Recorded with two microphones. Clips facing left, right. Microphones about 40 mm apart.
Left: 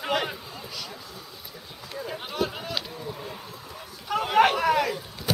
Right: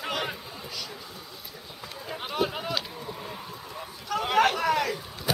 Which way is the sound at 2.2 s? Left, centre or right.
Centre.